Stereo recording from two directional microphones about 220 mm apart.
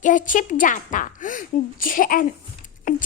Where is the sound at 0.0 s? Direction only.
35° left (ahead or behind).